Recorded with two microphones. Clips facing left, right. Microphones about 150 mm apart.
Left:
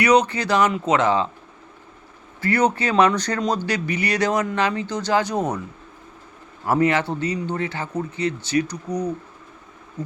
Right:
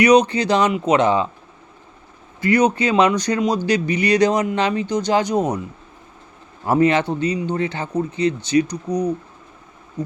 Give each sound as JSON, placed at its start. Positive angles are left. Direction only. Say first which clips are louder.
{"t": 0.0, "sound": "speech", "louder": "right 4 dB", "side_deg": -20}
{"t": 2.4, "sound": "speech", "louder": "right 4 dB", "side_deg": -15}
{"t": 6.7, "sound": "speech", "louder": "right 3 dB", "side_deg": -20}